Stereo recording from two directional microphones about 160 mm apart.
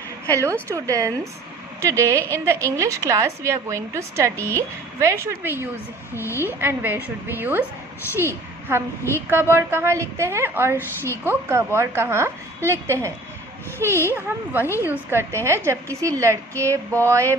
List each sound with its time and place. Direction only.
0.3 s a woman's voice: 20° right (ahead or behind)
6.1 s a woman's voice: 15° left (ahead or behind)
6.4 s a woman's voice: 15° right (ahead or behind)